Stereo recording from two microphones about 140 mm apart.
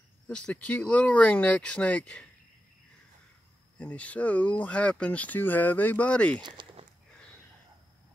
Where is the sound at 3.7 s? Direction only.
10° left (ahead or behind).